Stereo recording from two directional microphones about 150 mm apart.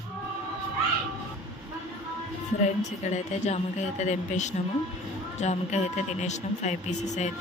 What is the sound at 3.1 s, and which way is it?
Speech, 50° left (ahead or behind).